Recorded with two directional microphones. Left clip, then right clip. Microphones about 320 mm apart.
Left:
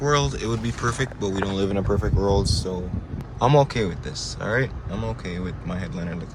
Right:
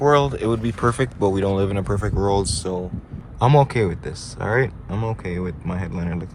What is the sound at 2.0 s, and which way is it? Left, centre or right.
Speech, right.